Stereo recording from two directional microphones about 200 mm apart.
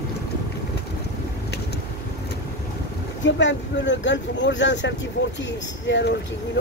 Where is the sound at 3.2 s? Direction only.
65° left (ahead or behind).